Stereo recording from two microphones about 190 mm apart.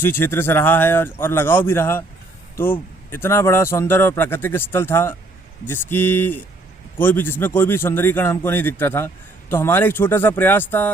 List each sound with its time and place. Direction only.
0.0 s speech: 10° left (ahead or behind)